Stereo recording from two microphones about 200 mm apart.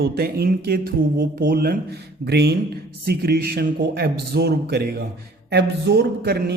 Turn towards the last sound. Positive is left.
turn(degrees=-50)  # may be behind; listen again after turning